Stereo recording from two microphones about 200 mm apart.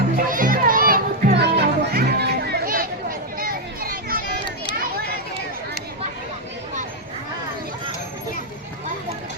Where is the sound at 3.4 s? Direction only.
45° right (ahead or behind).